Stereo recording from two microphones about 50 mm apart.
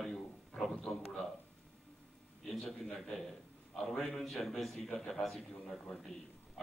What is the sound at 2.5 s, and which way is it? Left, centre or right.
A man's voice, centre.